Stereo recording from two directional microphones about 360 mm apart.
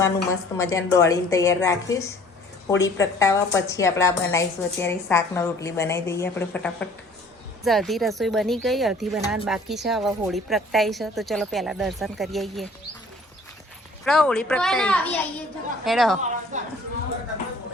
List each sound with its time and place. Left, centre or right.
0.5 s a woman's voice: centre
14.0 s a woman's voice: centre
16.5 s speech: centre